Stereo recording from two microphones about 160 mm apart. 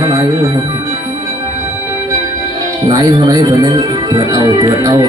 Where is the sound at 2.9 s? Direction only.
20° right (ahead or behind).